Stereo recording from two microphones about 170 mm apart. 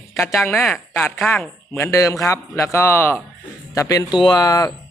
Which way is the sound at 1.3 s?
15° left (ahead or behind).